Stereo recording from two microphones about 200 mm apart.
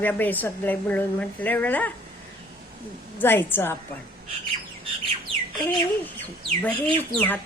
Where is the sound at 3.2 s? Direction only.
10° left (ahead or behind).